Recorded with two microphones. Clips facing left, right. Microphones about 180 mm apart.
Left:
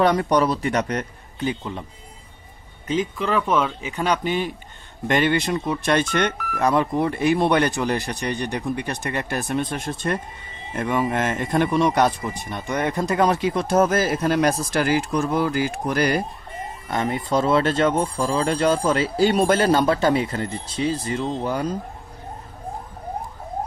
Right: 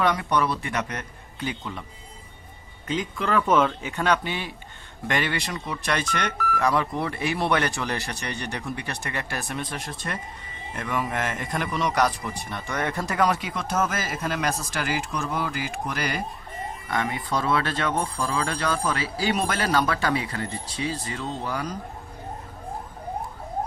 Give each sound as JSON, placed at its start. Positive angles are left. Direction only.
{"t": 0.0, "sound": "speech", "side_deg": 35}
{"t": 1.4, "sound": "speech", "side_deg": 25}
{"t": 3.2, "sound": "speech", "side_deg": 0}
{"t": 3.9, "sound": "a man's voice", "side_deg": 15}
{"t": 16.9, "sound": "speech", "side_deg": 25}